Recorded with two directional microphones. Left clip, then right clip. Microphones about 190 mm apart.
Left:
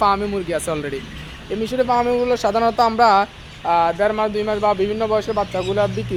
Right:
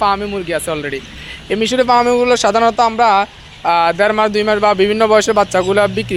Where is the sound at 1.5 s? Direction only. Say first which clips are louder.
Right 7 dB; 15° right (ahead or behind); by 3.3 s centre (ahead or behind).